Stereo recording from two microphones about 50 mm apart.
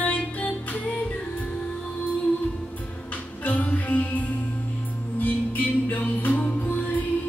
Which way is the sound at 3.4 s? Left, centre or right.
Left.